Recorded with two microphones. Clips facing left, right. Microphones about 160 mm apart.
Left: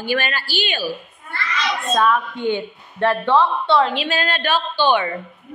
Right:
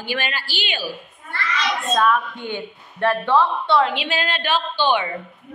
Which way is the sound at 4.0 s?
15° right (ahead or behind).